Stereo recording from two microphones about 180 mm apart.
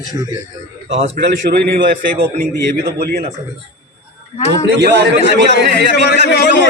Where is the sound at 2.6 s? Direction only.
70° right (ahead or behind).